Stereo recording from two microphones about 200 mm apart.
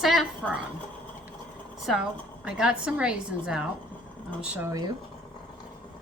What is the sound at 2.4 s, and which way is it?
A woman's voice, 5° right (ahead or behind).